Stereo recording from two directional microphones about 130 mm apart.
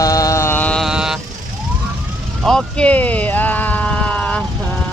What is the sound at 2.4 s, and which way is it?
Vehicle, 5° left (ahead or behind).